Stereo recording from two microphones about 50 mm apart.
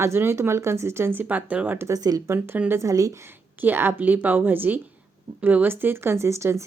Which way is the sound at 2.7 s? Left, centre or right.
Right.